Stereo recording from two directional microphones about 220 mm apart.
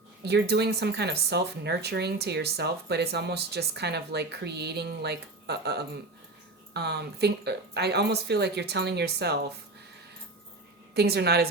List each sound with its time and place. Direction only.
0.3 s speech: 50° right (ahead or behind)
10.9 s speech: 50° right (ahead or behind)